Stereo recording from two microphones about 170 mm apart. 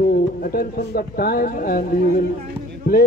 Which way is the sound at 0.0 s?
60° left (ahead or behind).